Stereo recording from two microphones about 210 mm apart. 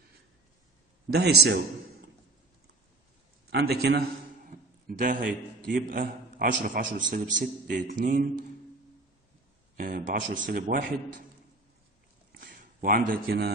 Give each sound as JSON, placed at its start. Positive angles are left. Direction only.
{"t": 1.1, "sound": "a man's voice", "side_deg": -50}
{"t": 3.4, "sound": "a man's voice", "side_deg": -50}
{"t": 9.8, "sound": "a man's voice", "side_deg": -40}
{"t": 12.3, "sound": "a sound", "side_deg": -45}